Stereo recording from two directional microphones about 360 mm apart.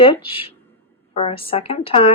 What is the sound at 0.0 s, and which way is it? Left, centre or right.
Speech, centre.